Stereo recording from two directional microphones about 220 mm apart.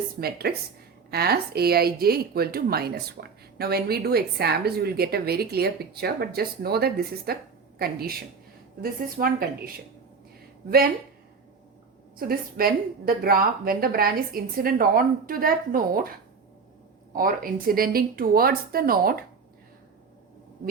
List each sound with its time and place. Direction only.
0.2 s speech: 45° right (ahead or behind)
12.1 s a woman's voice: 40° right (ahead or behind)
17.2 s a woman's voice: 40° right (ahead or behind)